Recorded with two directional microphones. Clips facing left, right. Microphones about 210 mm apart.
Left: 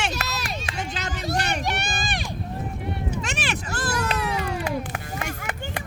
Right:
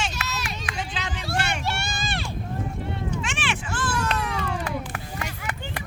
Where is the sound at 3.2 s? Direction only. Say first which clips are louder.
Left 1 dB; 40° left (ahead or behind).